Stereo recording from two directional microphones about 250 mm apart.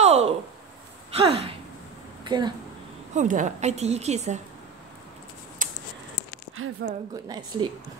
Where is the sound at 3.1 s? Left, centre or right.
Right.